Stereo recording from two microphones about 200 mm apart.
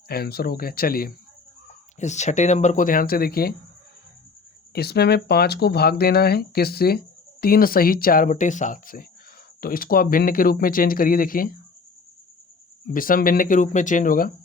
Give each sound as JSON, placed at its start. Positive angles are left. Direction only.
{"t": 0.1, "sound": "speech", "side_deg": 50}
{"t": 2.0, "sound": "speech", "side_deg": 35}
{"t": 4.7, "sound": "speech", "side_deg": 55}
{"t": 12.9, "sound": "speech", "side_deg": 45}